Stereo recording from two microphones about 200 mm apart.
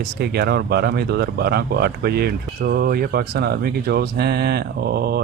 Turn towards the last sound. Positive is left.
turn(degrees=-50)  # may be behind; listen again after turning